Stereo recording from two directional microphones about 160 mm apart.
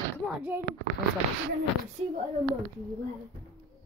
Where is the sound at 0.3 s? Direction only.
10° right (ahead or behind).